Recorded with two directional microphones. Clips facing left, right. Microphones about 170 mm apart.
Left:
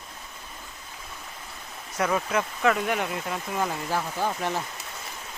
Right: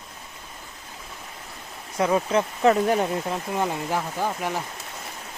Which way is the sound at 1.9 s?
25° right (ahead or behind).